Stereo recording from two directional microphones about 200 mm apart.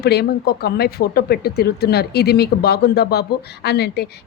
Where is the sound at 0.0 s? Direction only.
55° left (ahead or behind).